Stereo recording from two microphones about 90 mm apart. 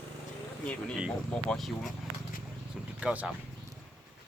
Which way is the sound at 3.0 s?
15° right (ahead or behind).